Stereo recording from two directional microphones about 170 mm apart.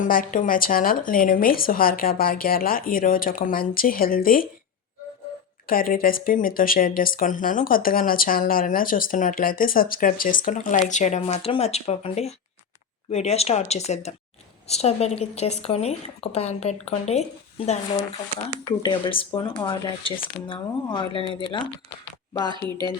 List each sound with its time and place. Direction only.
0.0 s speech: 50° left (ahead or behind)
5.6 s speech: 55° left (ahead or behind); by 17.2 s 40° left (ahead or behind)
18.4 s speech: 25° left (ahead or behind)
22.6 s speech: 10° left (ahead or behind)